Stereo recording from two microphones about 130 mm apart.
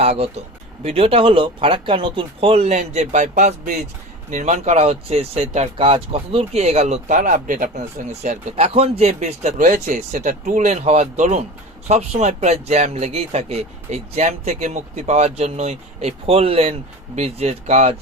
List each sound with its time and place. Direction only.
0.0 s speech: 50° right (ahead or behind)
5.7 s speech: 45° right (ahead or behind); by 7.7 s 90° right
8.2 s speech: 60° right (ahead or behind)
11.9 s speech: 55° right (ahead or behind)